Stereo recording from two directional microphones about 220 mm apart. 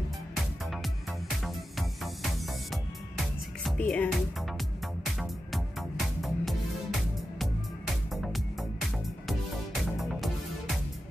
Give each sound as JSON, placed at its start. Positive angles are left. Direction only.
{"t": 3.6, "sound": "speech", "side_deg": 5}
{"t": 5.2, "sound": "music", "side_deg": 0}